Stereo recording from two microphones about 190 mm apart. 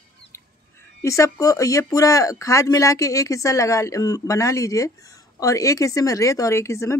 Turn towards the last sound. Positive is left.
turn(degrees=15)  # may be behind; listen again after turning